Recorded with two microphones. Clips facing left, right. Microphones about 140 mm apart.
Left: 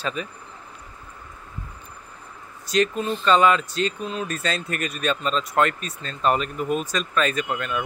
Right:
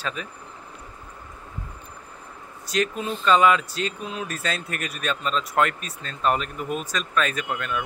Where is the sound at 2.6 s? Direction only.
5° right (ahead or behind).